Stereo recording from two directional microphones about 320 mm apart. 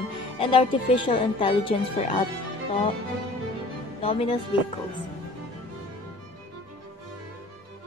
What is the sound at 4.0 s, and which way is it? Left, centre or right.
Speech, centre.